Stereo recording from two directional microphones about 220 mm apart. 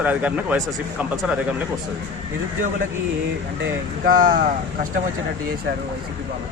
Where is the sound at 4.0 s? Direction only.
40° right (ahead or behind).